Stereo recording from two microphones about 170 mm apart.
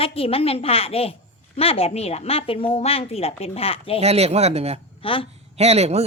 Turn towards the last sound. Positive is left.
turn(degrees=-40)  # may be behind; listen again after turning